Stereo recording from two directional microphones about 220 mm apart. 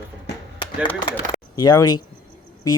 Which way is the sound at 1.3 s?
15° left (ahead or behind).